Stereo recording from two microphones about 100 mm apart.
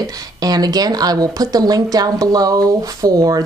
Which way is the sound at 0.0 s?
40° right (ahead or behind).